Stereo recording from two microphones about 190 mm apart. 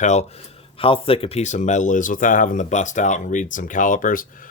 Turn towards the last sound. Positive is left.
turn(degrees=45)  # may be behind; listen again after turning